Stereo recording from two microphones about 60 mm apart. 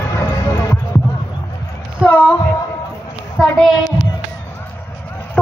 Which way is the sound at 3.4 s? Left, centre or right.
Centre.